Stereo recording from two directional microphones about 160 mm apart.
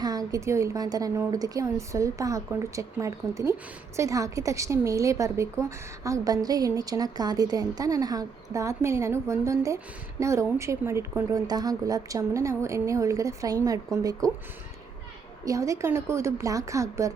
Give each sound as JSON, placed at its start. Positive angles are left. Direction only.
{"t": 0.0, "sound": "a woman's voice", "side_deg": -25}
{"t": 15.4, "sound": "a woman's voice", "side_deg": -20}